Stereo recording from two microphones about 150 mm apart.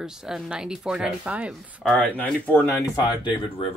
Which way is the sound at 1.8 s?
5° left (ahead or behind).